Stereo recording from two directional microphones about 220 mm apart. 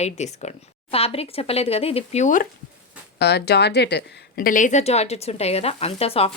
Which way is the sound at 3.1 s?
50° left (ahead or behind).